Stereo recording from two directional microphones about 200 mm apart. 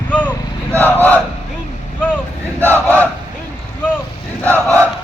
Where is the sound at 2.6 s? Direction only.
10° right (ahead or behind).